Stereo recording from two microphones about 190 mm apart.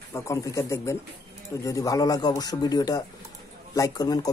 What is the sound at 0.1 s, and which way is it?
Speech, 15° left (ahead or behind).